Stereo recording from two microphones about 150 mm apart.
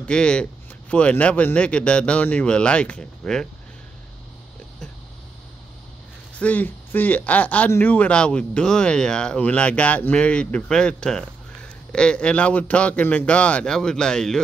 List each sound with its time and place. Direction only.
0.0 s speech: 5° left (ahead or behind)
6.3 s speech: 10° left (ahead or behind)